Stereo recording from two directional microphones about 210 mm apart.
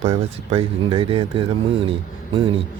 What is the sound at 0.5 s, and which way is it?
Speech, 25° right (ahead or behind).